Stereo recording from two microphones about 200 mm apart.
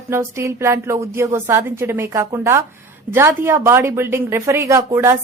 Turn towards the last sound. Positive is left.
turn(degrees=-15)  # may be behind; listen again after turning